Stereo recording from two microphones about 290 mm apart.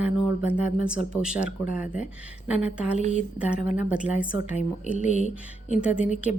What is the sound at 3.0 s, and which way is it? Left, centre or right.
Speech, right.